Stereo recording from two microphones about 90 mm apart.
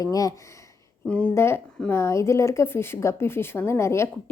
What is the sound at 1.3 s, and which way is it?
A woman's voice, 30° left (ahead or behind).